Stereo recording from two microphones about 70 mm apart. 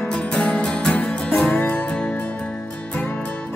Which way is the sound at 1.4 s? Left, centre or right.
Left.